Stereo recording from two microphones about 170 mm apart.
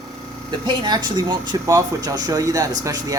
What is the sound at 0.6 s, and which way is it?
Speech, 25° right (ahead or behind).